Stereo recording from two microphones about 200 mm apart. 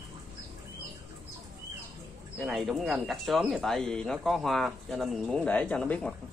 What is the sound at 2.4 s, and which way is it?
Speech, centre (ahead or behind).